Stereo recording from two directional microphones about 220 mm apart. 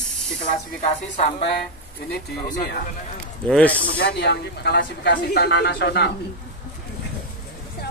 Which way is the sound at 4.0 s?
50° left (ahead or behind).